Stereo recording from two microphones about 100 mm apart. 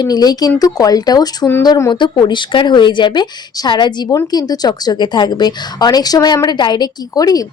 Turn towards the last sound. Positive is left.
turn(degrees=40)  # may be behind; listen again after turning